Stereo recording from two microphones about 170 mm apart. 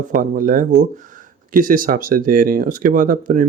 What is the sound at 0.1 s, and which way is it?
Speech, 55° right (ahead or behind).